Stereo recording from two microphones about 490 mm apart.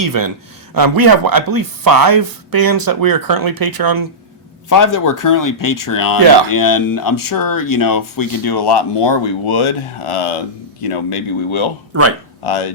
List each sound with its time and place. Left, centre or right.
0.0 s speech: right
4.7 s speech: left